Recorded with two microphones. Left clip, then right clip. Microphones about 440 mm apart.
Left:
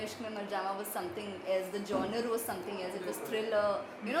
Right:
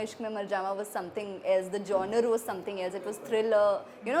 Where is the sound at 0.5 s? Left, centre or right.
Right.